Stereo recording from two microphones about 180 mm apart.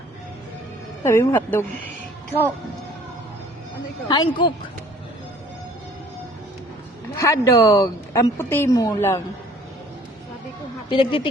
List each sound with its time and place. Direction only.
1.0 s a woman's voice: 15° left (ahead or behind)
4.1 s speech: 25° left (ahead or behind)
7.2 s a woman's voice: 15° left (ahead or behind)
10.8 s speech: 30° left (ahead or behind)